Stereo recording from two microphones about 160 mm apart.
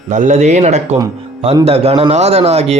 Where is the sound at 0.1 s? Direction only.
50° right (ahead or behind).